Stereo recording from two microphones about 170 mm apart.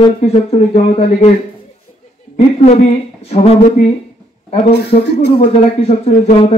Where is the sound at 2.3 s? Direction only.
40° left (ahead or behind).